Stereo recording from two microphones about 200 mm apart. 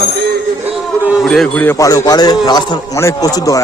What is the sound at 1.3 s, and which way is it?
A man's voice, 5° left (ahead or behind).